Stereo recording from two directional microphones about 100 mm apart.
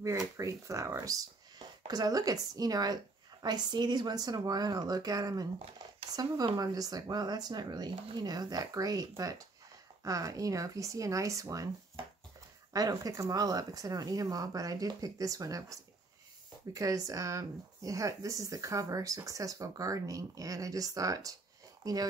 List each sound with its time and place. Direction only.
0.0 s speech: 30° right (ahead or behind)
12.7 s speech: 35° right (ahead or behind)